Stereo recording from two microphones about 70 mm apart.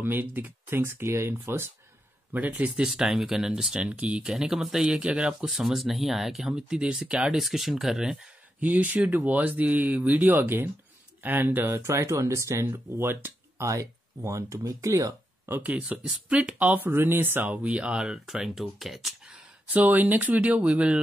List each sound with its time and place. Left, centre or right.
0.0 s speech: right
2.3 s speech: right
2.9 s speech: centre
4.3 s speech: centre
8.5 s speech: right
13.7 s speech: right
15.6 s speech: centre
16.6 s speech: right; by 19.3 s centre
19.7 s speech: right